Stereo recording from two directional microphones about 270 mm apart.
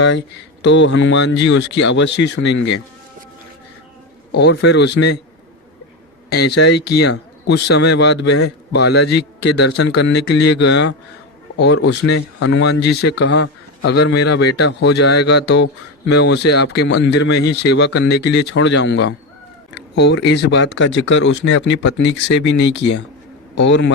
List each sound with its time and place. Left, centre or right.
0.0 s speech: left
4.3 s speech: left
6.3 s speech: left